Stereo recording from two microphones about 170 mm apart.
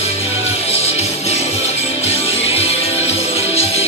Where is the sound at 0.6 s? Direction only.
35° left (ahead or behind).